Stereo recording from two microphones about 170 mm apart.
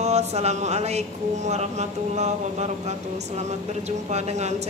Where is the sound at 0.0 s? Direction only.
40° right (ahead or behind).